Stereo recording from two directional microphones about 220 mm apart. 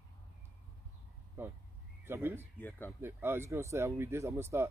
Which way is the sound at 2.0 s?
10° right (ahead or behind).